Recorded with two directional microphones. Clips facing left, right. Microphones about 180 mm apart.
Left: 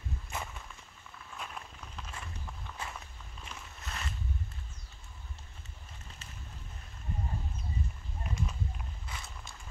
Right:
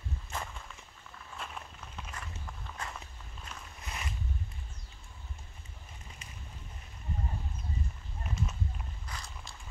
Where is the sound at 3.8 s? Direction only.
15° right (ahead or behind).